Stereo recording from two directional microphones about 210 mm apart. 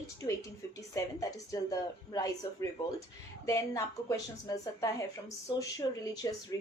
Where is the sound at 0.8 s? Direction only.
15° left (ahead or behind).